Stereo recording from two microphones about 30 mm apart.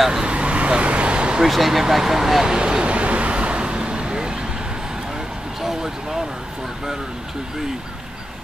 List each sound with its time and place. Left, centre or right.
0.2 s vehicle: right
1.4 s speech: centre
2.4 s speech: right
2.8 s vehicle: right